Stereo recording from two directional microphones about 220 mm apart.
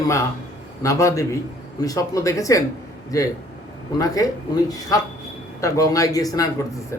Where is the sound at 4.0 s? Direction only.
15° left (ahead or behind).